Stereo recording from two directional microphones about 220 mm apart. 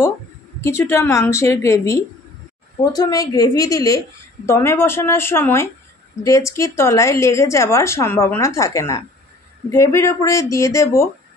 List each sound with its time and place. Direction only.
0.6 s a woman's voice: 10° left (ahead or behind)